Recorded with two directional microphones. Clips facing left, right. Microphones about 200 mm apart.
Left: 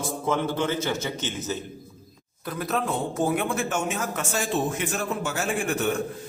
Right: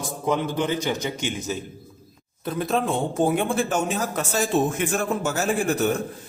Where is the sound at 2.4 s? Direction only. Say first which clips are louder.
Right 4 dB; 25° right (ahead or behind).